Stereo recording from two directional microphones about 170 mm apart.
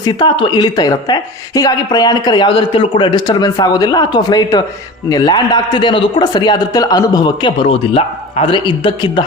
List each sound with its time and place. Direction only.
0.0 s a woman's voice: 25° left (ahead or behind)